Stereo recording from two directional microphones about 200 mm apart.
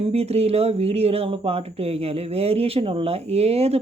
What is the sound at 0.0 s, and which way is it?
Speech, 30° right (ahead or behind).